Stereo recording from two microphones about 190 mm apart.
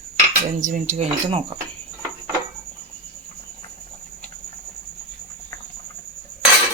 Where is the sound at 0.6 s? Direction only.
40° right (ahead or behind).